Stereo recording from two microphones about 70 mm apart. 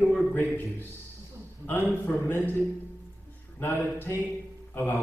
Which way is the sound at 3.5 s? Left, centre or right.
Left.